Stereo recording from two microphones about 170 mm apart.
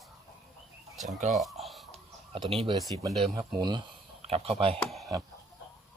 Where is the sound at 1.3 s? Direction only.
Centre (ahead or behind).